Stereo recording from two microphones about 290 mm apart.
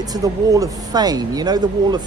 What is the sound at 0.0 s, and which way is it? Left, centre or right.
A man's voice, centre.